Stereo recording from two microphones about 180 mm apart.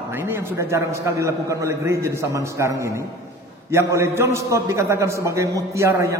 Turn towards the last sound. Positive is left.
turn(degrees=-15)  # may be behind; listen again after turning